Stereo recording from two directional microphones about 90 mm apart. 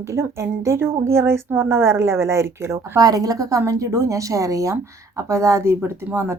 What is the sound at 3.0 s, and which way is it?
A woman's voice, 45° right (ahead or behind).